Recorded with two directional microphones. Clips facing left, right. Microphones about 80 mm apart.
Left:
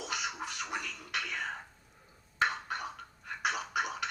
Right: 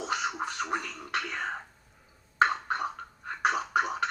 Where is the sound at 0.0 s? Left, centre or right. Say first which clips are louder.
Right 6 dB; right.